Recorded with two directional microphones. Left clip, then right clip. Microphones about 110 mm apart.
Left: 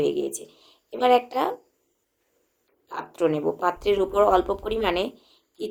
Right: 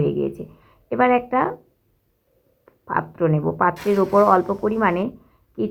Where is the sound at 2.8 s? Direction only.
25° left (ahead or behind).